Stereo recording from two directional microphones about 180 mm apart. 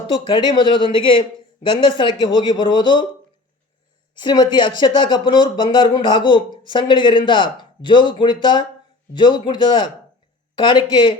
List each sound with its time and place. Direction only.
0.1 s a man's voice: 25° left (ahead or behind)
4.1 s a man's voice: 25° left (ahead or behind)